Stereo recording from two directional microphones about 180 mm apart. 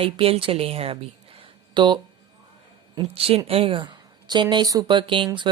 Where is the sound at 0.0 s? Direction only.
30° right (ahead or behind).